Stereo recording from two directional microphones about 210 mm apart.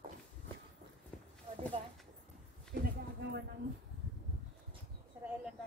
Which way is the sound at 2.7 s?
50° right (ahead or behind).